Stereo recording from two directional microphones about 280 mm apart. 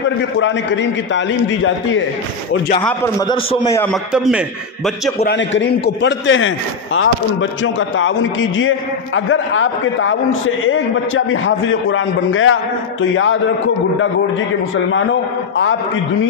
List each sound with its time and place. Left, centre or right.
0.4 s a man's voice: left
2.9 s a man's voice: centre
5.2 s a man's voice: left